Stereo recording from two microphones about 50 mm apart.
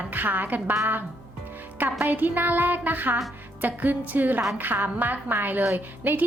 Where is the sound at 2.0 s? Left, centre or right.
Right.